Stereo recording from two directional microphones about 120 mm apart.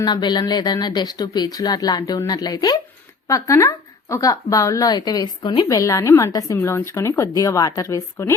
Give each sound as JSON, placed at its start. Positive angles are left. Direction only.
{"t": 0.0, "sound": "a woman's voice", "side_deg": 35}